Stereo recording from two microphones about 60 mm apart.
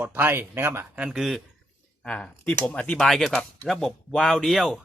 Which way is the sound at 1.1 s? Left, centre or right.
Centre.